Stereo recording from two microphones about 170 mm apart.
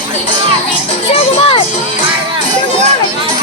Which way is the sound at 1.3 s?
30° left (ahead or behind).